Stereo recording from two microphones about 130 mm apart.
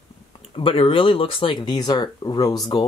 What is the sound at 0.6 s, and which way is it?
Speech, 45° left (ahead or behind).